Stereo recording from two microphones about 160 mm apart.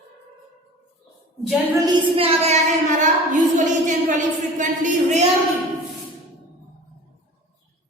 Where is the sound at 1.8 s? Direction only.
30° right (ahead or behind).